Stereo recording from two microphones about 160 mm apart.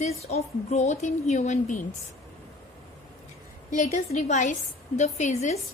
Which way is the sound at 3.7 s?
45° left (ahead or behind).